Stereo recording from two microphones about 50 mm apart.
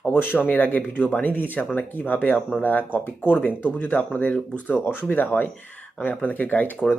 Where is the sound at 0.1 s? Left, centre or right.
Left.